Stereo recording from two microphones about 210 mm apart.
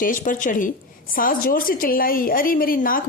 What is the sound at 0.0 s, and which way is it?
A woman's voice, 40° left (ahead or behind).